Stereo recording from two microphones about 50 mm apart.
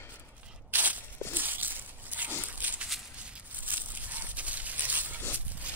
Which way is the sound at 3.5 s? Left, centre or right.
Right.